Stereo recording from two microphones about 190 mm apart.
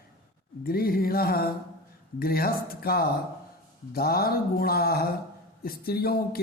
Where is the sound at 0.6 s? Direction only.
50° left (ahead or behind).